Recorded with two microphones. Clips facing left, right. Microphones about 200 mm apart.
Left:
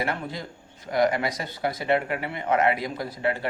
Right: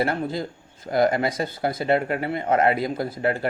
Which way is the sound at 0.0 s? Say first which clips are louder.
Right 6 dB; 35° right (ahead or behind).